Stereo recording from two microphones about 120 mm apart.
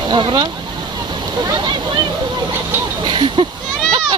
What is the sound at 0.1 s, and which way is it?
Speech, 40° right (ahead or behind).